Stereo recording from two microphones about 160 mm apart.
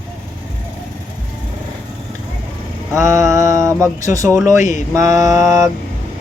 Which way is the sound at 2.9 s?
20° right (ahead or behind).